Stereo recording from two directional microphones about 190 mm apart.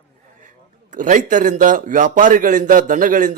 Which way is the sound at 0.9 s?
40° right (ahead or behind).